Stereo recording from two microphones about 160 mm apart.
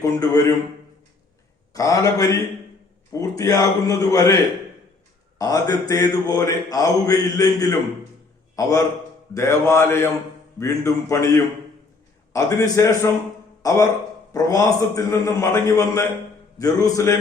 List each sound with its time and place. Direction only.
0.0 s mantra: 20° left (ahead or behind)
1.7 s mantra: 20° left (ahead or behind)
5.4 s mantra: 25° left (ahead or behind)
13.6 s speech: 20° left (ahead or behind)
14.3 s mantra: 20° left (ahead or behind)